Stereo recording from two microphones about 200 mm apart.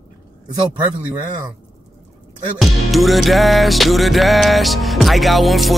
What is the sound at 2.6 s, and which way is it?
Music, centre (ahead or behind).